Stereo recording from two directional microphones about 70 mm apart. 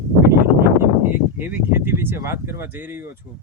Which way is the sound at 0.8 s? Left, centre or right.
Right.